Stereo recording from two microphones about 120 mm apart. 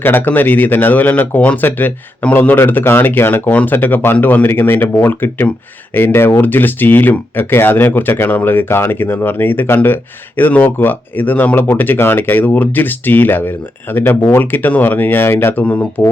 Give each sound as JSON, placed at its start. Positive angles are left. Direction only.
{"t": 0.0, "sound": "speech", "side_deg": 15}